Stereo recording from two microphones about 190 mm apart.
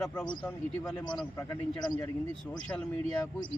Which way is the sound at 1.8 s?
20° left (ahead or behind).